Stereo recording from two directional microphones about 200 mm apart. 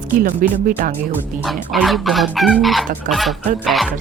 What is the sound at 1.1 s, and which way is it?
Speech, centre (ahead or behind).